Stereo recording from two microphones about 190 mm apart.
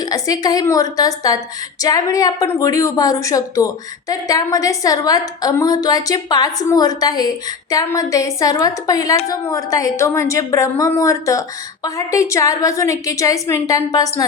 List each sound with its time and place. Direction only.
0.0 s a woman's voice: 20° left (ahead or behind)